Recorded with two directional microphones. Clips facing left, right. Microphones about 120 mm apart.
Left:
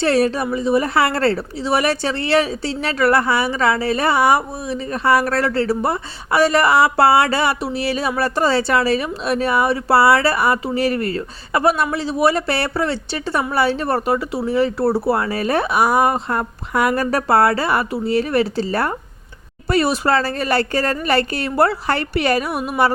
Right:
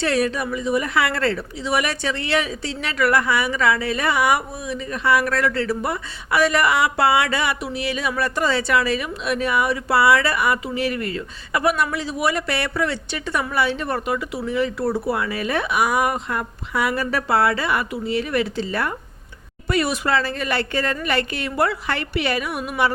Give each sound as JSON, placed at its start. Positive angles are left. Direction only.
{"t": 0.0, "sound": "a woman's voice", "side_deg": 35}